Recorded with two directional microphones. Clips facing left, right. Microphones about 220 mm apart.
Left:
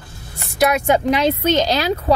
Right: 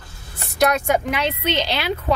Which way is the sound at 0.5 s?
5° left (ahead or behind).